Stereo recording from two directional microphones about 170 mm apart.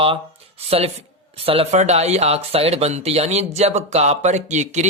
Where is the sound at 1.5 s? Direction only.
40° right (ahead or behind).